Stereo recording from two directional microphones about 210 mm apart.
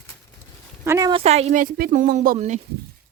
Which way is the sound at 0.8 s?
15° right (ahead or behind).